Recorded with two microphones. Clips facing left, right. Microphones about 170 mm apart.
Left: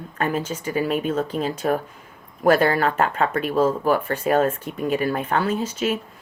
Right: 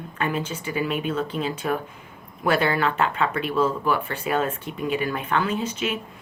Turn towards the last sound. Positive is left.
turn(degrees=40)  # may be behind; listen again after turning